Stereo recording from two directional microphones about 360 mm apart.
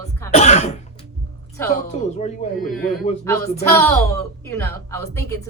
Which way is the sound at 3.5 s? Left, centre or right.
Centre.